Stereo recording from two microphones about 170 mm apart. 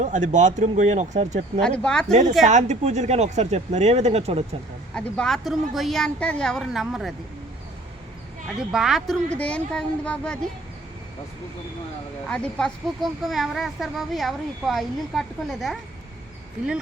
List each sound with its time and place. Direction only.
0.0 s speech: 45° right (ahead or behind)
1.6 s a child's voice: 5° left (ahead or behind)
2.5 s speech: 45° right (ahead or behind)
4.9 s a child's voice: 5° left (ahead or behind)
8.7 s a child's voice: 5° right (ahead or behind)
12.3 s a child's voice: 5° left (ahead or behind)